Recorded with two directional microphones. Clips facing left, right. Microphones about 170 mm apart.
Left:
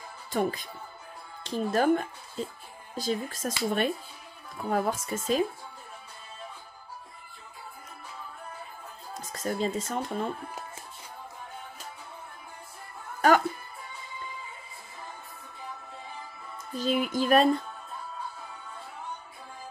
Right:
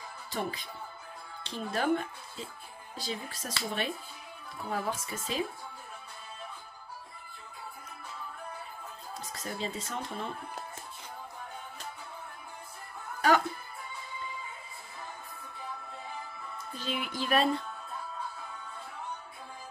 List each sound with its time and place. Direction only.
0.3 s speech: 45° left (ahead or behind)
4.6 s speech: 45° left (ahead or behind)
9.3 s speech: 45° left (ahead or behind)
13.2 s music: 45° left (ahead or behind)
16.7 s speech: 45° left (ahead or behind)